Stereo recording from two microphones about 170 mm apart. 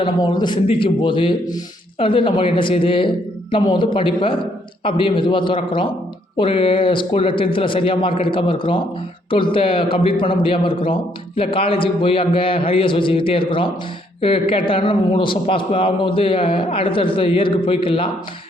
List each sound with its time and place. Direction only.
0.0 s a man's voice: 25° left (ahead or behind)